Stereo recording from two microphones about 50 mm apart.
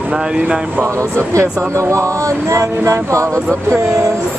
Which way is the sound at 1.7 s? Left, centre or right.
Right.